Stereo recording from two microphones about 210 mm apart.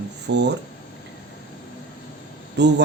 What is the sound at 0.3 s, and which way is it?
Speech, 55° right (ahead or behind).